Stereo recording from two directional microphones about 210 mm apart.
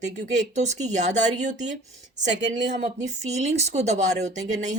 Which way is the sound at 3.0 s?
30° right (ahead or behind).